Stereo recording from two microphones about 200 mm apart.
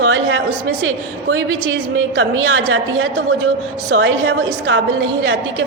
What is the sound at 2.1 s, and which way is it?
A woman's voice, 90° right.